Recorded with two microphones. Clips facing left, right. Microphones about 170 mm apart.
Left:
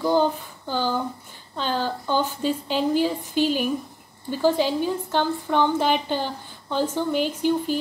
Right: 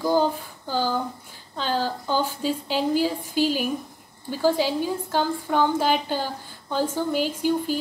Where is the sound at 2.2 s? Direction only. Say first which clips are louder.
Left 1 dB; 10° right (ahead or behind).